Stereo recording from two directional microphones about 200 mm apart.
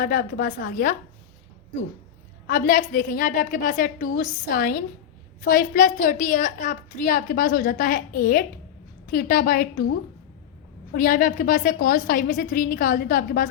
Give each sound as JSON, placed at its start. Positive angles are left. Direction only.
{"t": 0.0, "sound": "a woman's voice", "side_deg": 45}
{"t": 2.5, "sound": "a woman's voice", "side_deg": 45}
{"t": 10.9, "sound": "a woman's voice", "side_deg": 45}